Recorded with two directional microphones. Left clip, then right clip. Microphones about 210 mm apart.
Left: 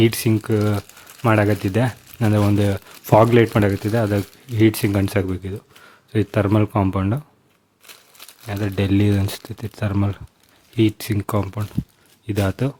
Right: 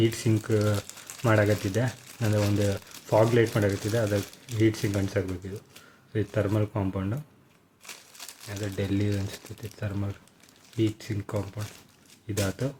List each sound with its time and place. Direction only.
0.0 s speech: 35° left (ahead or behind)
8.4 s speech: 50° left (ahead or behind)